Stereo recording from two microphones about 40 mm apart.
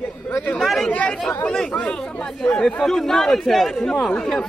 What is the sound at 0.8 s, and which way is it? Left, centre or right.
Chatter, left.